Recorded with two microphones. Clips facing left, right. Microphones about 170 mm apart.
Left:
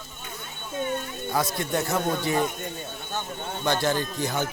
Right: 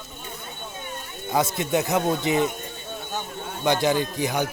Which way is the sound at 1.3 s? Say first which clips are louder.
Right 4 dB; 20° right (ahead or behind).